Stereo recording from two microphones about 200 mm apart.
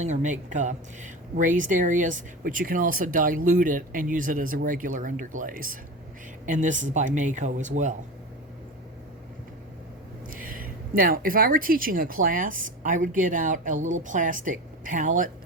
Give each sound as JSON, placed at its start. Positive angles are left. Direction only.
{"t": 0.0, "sound": "speech", "side_deg": -35}
{"t": 10.2, "sound": "speech", "side_deg": -45}